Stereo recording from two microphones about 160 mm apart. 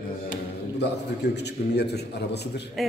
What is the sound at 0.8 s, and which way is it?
A man's voice, 90° left.